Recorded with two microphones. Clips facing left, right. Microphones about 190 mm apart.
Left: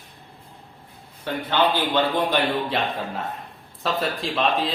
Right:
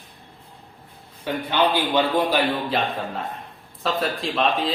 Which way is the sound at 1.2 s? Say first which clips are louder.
Even; 15° right (ahead or behind).